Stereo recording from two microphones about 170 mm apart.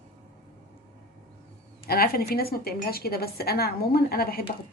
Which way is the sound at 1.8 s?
60° left (ahead or behind).